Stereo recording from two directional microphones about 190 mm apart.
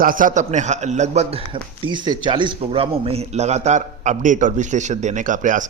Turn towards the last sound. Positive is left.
turn(degrees=-40)  # may be behind; listen again after turning